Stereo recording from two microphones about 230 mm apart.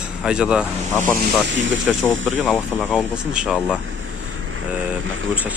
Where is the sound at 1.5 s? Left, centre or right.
Right.